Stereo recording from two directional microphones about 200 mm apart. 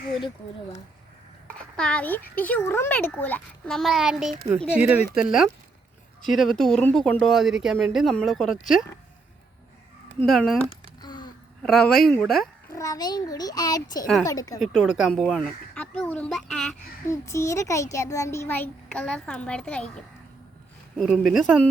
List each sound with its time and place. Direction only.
1.7 s a child's voice: 5° left (ahead or behind)
10.2 s speech: centre (ahead or behind)
11.0 s a sound: 20° left (ahead or behind)
11.6 s speech: 5° left (ahead or behind)
12.7 s a child's voice: 15° left (ahead or behind)
14.6 s speech: centre (ahead or behind)
17.1 s a child's voice: 15° left (ahead or behind)